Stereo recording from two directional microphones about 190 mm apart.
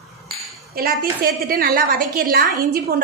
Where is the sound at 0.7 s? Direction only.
55° right (ahead or behind).